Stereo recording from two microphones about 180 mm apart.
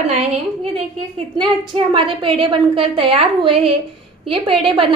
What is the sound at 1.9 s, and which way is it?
A woman's voice, 30° right (ahead or behind).